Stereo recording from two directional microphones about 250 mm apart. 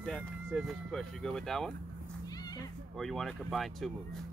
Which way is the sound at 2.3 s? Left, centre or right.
Centre.